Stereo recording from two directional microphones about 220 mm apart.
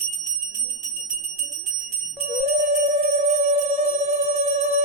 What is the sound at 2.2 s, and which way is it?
Music, 30° right (ahead or behind).